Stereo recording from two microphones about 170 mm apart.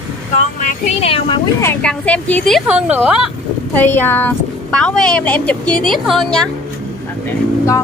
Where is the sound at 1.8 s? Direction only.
10° left (ahead or behind).